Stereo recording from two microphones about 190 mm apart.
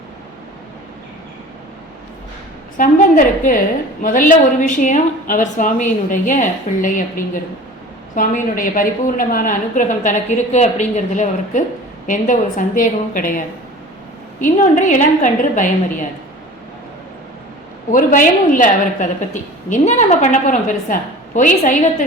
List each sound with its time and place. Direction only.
2.7 s a woman's voice: 45° left (ahead or behind)
8.1 s a woman's voice: 45° left (ahead or behind)
14.4 s a woman's voice: 40° left (ahead or behind)
17.9 s a woman's voice: 45° left (ahead or behind)